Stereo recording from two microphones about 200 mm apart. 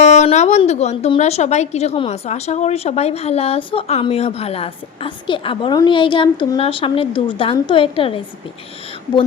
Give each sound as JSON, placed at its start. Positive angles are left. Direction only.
{"t": 0.0, "sound": "a woman's voice", "side_deg": 35}